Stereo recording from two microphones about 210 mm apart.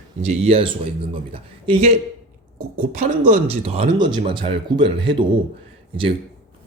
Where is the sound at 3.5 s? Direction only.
30° right (ahead or behind).